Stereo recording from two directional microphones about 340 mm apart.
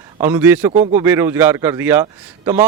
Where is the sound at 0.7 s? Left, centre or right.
Centre.